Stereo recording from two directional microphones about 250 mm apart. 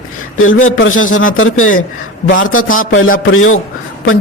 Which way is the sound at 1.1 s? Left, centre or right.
Left.